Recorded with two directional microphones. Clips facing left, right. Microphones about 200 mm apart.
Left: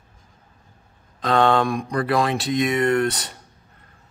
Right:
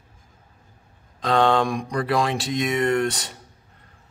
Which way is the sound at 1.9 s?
55° left (ahead or behind).